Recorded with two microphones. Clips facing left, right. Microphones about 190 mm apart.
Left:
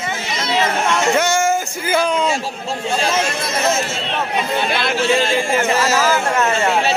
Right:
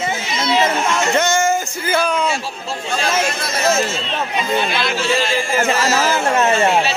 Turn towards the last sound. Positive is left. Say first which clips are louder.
# right 2 dB
turn(degrees=-20)  # may be behind; listen again after turning